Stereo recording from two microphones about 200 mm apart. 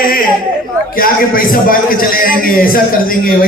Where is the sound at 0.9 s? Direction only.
45° left (ahead or behind).